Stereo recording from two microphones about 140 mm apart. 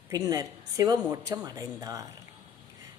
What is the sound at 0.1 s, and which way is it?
Speech, 25° right (ahead or behind).